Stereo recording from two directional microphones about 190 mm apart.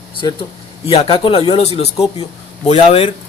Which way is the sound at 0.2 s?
20° left (ahead or behind).